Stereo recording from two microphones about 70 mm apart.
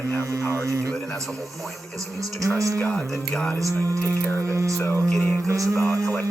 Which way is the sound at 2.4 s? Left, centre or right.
Right.